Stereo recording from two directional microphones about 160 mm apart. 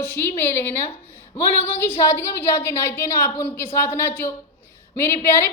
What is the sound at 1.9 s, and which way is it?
A woman's voice, 15° left (ahead or behind).